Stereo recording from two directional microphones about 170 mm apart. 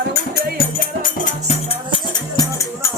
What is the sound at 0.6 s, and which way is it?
Music, 55° left (ahead or behind).